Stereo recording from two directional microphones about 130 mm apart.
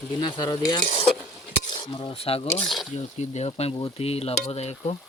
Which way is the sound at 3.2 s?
60° left (ahead or behind).